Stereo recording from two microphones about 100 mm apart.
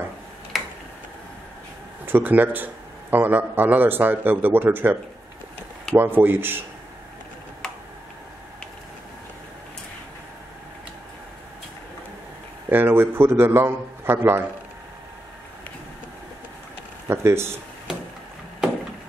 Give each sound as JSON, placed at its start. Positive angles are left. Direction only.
{"t": 0.5, "sound": "tick-tock", "side_deg": 0}
{"t": 2.0, "sound": "a man's voice", "side_deg": -20}
{"t": 5.9, "sound": "a man's voice", "side_deg": -20}
{"t": 12.6, "sound": "a man's voice", "side_deg": -20}
{"t": 17.1, "sound": "a man's voice", "side_deg": -25}